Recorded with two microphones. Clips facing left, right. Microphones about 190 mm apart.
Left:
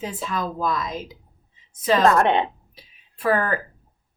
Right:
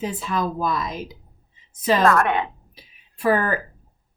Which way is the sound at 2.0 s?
25° left (ahead or behind).